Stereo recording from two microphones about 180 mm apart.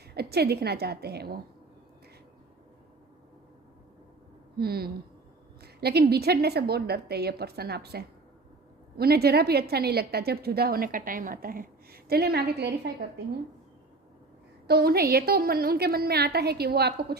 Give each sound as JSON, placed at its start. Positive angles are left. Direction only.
{"t": 0.1, "sound": "a woman's voice", "side_deg": -60}
{"t": 4.5, "sound": "a woman's voice", "side_deg": -60}
{"t": 14.7, "sound": "a woman's voice", "side_deg": -60}